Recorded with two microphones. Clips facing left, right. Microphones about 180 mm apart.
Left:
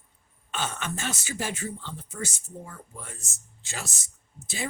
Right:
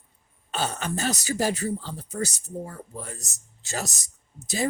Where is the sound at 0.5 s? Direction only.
35° right (ahead or behind).